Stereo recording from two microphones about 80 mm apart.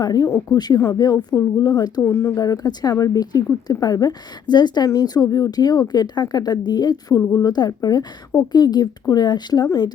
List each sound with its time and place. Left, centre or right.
0.0 s a woman's voice: left
2.0 s speech: left
2.3 s a woman's voice: left
9.6 s a woman's voice: left